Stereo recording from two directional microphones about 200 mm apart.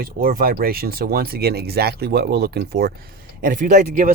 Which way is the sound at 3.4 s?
40° right (ahead or behind).